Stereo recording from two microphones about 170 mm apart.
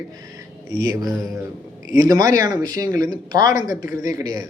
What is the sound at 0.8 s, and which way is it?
Speech, 20° right (ahead or behind).